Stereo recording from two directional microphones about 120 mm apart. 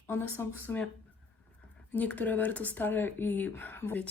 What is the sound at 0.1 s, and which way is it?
Speech, 20° left (ahead or behind).